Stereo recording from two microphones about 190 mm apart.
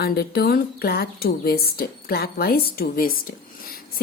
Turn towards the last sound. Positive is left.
turn(degrees=50)  # may be behind; listen again after turning